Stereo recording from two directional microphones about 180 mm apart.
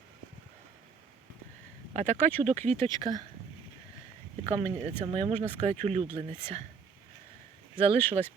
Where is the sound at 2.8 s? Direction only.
25° right (ahead or behind).